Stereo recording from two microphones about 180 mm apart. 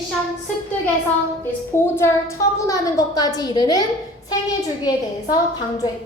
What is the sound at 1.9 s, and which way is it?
A woman's voice, 15° left (ahead or behind).